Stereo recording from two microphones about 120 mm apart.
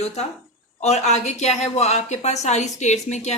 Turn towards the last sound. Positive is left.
turn(degrees=75)  # may be behind; listen again after turning